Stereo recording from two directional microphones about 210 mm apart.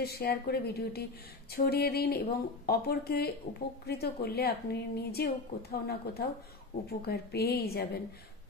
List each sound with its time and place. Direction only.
0.0 s a woman's voice: 45° left (ahead or behind)
3.5 s a woman's voice: 30° left (ahead or behind)
3.8 s a woman's voice: 50° left (ahead or behind)